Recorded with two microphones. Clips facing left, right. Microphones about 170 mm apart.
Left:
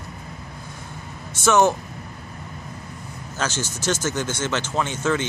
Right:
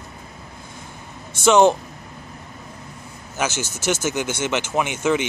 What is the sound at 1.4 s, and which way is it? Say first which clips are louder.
Speech: right 3 dB; 15° right (ahead or behind).